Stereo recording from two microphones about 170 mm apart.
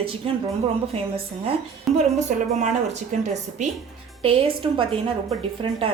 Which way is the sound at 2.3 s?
50° right (ahead or behind).